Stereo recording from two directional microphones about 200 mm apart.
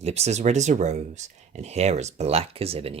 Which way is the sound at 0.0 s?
30° right (ahead or behind).